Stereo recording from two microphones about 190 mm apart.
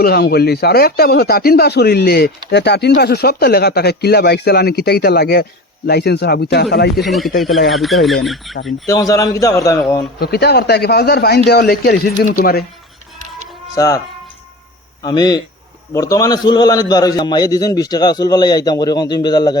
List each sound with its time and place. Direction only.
0.0 s speech: 55° left (ahead or behind)
7.0 s speech: centre (ahead or behind)
8.9 s a man's voice: 20° left (ahead or behind)
10.2 s speech: 60° left (ahead or behind)
13.7 s a man's voice: 20° left (ahead or behind)
15.0 s a man's voice: 20° left (ahead or behind)